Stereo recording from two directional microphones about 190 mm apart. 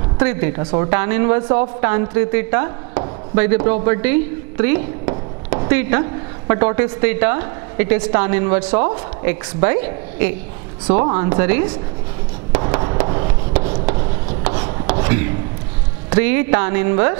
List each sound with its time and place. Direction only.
0.2 s a woman's voice: 15° right (ahead or behind)
0.6 s speech: 30° right (ahead or behind)
0.8 s a woman's voice: 15° right (ahead or behind)
12.6 s a sound: 25° right (ahead or behind)
14.4 s rub: 10° right (ahead or behind)
16.2 s a woman's voice: 15° right (ahead or behind)